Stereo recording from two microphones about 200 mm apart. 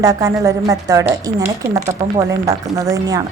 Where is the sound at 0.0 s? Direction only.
15° right (ahead or behind).